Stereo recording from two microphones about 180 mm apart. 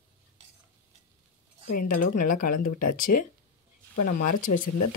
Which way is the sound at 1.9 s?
50° left (ahead or behind).